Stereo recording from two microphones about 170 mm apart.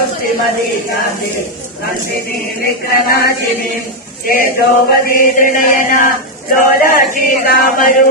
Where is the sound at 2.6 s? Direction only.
65° left (ahead or behind).